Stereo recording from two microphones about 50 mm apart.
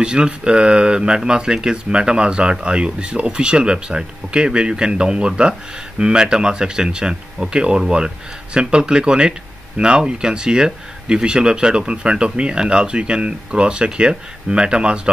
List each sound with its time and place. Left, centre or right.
0.0 s speech: centre